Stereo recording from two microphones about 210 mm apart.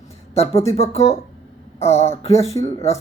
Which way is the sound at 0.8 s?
30° left (ahead or behind).